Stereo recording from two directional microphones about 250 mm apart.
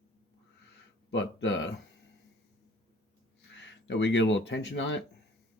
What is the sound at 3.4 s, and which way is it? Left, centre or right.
Speech, left.